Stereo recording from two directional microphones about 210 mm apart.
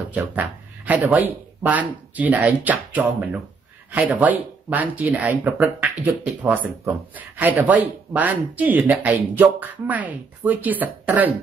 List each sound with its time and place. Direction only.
0.1 s speech: 5° right (ahead or behind)